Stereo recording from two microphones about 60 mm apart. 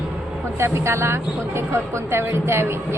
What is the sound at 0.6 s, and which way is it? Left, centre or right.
Speech, right.